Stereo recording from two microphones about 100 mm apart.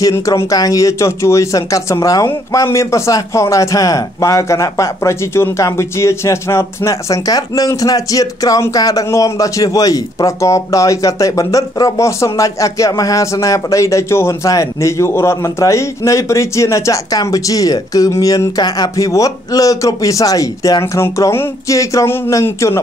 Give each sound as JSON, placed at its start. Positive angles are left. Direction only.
{"t": 0.1, "sound": "a man's voice", "side_deg": 30}